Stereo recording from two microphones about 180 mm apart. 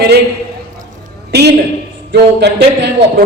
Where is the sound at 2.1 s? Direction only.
70° right (ahead or behind).